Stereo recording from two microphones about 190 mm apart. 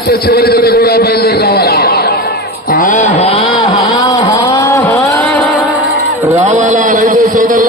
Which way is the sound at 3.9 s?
25° left (ahead or behind).